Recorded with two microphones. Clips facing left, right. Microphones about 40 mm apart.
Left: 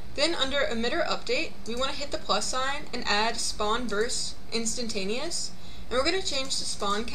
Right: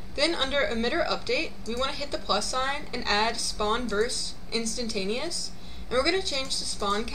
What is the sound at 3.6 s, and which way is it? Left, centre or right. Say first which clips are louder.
A woman's voice: right 1 dB; centre.